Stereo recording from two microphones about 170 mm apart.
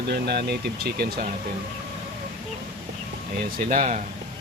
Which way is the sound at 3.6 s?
55° right (ahead or behind).